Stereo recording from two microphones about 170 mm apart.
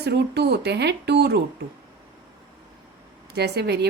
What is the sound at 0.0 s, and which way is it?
Speech, 75° right (ahead or behind).